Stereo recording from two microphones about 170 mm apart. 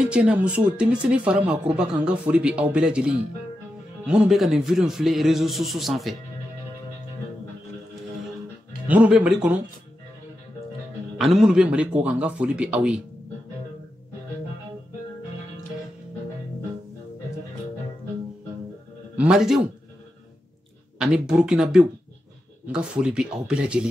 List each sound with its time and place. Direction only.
0.1 s a man's voice: 5° right (ahead or behind)
8.8 s speech: 10° right (ahead or behind)
11.1 s speech: centre (ahead or behind)
19.1 s a man's voice: 5° right (ahead or behind)
21.0 s a man's voice: 5° right (ahead or behind)